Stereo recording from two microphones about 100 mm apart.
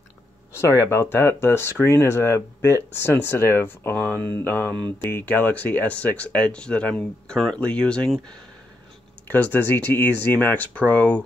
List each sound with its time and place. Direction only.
0.5 s speech: 25° left (ahead or behind); by 8.2 s 10° left (ahead or behind)
9.3 s speech: 20° left (ahead or behind)